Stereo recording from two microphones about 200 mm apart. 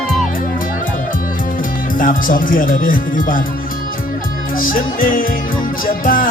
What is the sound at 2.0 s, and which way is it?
Speech, 40° left (ahead or behind).